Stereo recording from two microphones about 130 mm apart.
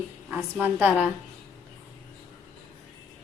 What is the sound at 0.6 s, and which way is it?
Speech, 15° right (ahead or behind).